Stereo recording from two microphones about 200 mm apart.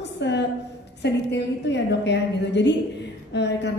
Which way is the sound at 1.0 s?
60° left (ahead or behind).